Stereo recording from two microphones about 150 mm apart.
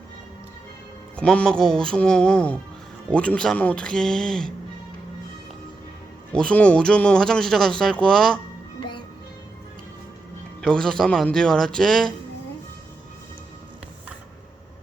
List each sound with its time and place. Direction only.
1.1 s speech: 5° left (ahead or behind)
6.3 s speech: 5° left (ahead or behind)
8.8 s music: 30° left (ahead or behind)
10.6 s speech: 5° left (ahead or behind)